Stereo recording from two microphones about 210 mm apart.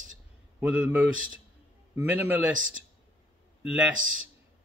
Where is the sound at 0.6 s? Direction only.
5° right (ahead or behind).